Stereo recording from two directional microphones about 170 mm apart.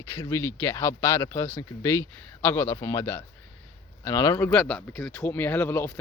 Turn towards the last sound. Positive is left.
turn(degrees=10)  # may be behind; listen again after turning